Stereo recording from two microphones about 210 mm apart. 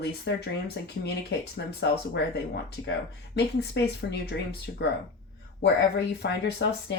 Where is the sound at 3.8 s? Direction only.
55° left (ahead or behind).